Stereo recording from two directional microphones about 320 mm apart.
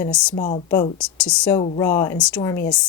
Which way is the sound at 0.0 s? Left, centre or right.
Centre.